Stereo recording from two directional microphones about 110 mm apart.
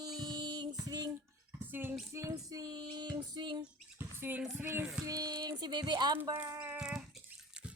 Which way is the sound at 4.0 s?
20° right (ahead or behind).